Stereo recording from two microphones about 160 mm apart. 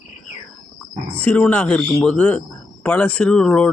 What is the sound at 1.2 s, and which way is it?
A man's voice, 10° left (ahead or behind).